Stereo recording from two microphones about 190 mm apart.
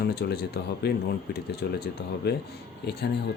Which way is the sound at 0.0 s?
55° left (ahead or behind).